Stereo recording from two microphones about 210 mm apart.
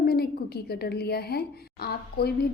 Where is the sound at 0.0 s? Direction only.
50° left (ahead or behind).